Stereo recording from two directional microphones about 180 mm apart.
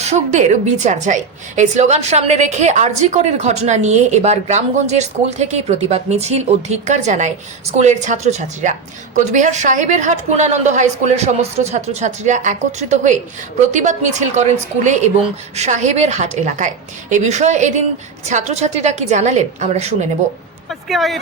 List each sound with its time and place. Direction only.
0.0 s a woman's voice: 40° right (ahead or behind)
15.5 s a woman's voice: 40° right (ahead or behind)
20.7 s speech: centre (ahead or behind)